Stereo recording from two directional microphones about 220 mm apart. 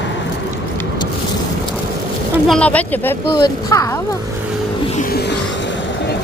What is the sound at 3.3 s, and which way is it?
Speech, 15° left (ahead or behind).